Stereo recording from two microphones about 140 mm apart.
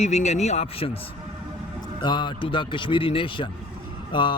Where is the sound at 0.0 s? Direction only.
50° left (ahead or behind).